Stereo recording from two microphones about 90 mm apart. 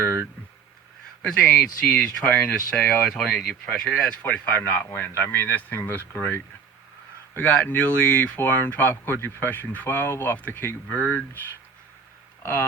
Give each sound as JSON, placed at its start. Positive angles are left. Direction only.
{"t": 1.2, "sound": "speech", "side_deg": 10}